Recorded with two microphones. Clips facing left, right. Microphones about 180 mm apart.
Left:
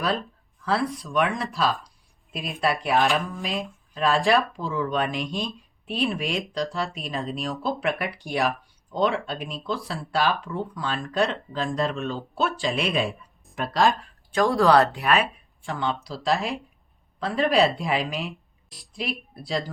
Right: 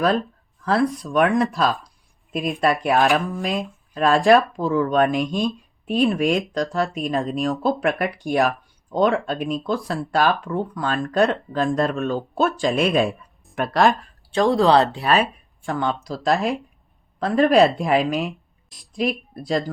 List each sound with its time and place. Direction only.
0.6 s speech: 45° right (ahead or behind)
13.6 s speech: 60° right (ahead or behind)
14.3 s speech: 25° right (ahead or behind)
15.6 s speech: 45° right (ahead or behind)